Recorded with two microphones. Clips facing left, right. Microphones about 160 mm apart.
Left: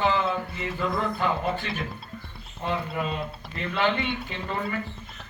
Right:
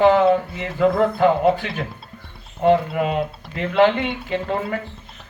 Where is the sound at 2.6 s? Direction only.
75° right (ahead or behind).